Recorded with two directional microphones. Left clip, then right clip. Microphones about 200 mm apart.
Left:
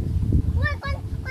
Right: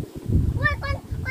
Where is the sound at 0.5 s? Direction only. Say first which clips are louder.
Right 6 dB; 40° right (ahead or behind).